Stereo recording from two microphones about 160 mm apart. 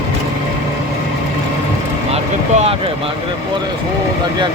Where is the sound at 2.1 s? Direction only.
40° right (ahead or behind).